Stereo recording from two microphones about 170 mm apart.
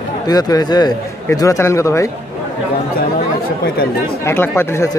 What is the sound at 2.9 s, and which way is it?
Speech, 60° left (ahead or behind).